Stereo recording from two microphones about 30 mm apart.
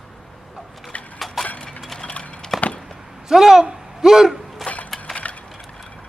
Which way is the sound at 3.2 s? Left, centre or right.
Centre.